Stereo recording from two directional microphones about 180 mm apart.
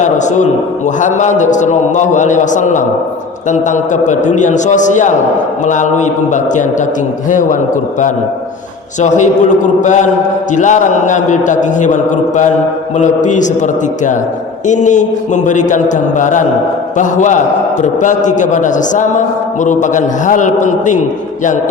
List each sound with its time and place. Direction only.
0.0 s a man's voice: 40° left (ahead or behind)
9.0 s a man's voice: 40° left (ahead or behind)
13.0 s a man's voice: 45° left (ahead or behind)